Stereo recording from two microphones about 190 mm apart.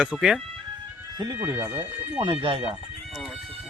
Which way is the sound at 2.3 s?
30° right (ahead or behind).